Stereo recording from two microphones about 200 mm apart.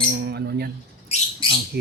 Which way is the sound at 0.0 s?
50° right (ahead or behind).